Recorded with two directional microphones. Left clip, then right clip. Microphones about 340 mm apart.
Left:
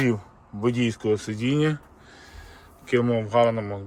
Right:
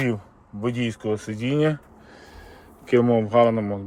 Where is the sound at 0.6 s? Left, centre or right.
Centre.